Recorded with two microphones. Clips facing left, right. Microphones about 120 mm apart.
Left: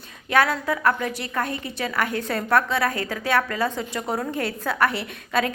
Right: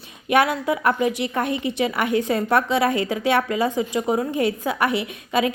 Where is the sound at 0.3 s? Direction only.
15° right (ahead or behind).